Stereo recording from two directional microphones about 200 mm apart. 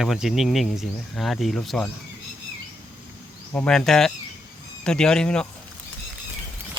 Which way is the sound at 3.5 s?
5° left (ahead or behind).